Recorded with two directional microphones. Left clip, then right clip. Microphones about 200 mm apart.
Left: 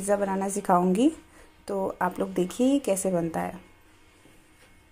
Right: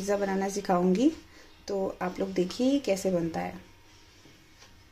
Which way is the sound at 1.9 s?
5° left (ahead or behind).